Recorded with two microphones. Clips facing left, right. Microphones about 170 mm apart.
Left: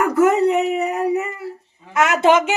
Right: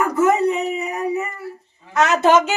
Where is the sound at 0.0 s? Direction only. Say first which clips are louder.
Left 2 dB; 75° left (ahead or behind).